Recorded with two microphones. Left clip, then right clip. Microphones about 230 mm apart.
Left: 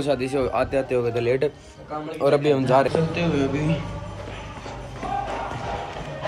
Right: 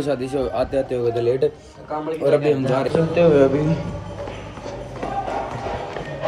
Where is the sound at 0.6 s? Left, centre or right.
Left.